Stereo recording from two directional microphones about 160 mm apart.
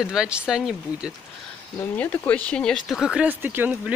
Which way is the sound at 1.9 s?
10° left (ahead or behind).